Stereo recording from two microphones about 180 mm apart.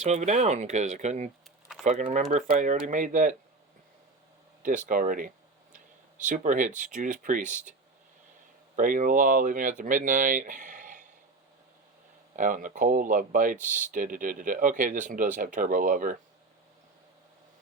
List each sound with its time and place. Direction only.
0.0 s speech: 40° right (ahead or behind)
4.9 s speech: 45° right (ahead or behind)
8.7 s speech: 45° right (ahead or behind)
12.4 s speech: 45° right (ahead or behind)